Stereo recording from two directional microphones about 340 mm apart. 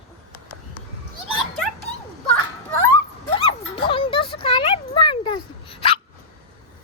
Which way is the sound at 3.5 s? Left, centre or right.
Centre.